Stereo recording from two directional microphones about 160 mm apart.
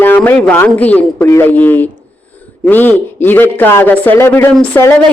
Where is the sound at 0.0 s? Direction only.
10° left (ahead or behind).